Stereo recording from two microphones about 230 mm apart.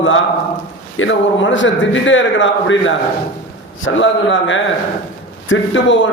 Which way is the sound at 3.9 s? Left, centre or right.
Left.